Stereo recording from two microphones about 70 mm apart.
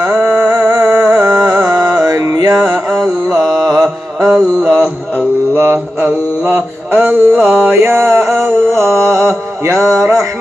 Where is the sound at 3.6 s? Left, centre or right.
Right.